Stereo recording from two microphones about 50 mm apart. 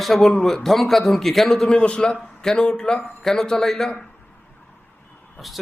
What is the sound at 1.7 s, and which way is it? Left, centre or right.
A man's voice, centre.